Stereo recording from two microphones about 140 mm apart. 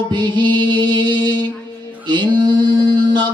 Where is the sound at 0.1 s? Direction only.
30° right (ahead or behind).